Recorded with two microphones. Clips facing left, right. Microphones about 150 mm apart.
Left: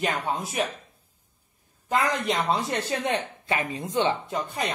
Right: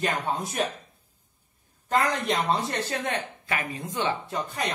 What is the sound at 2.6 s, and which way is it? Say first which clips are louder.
Speech: left 2 dB; 25° left (ahead or behind).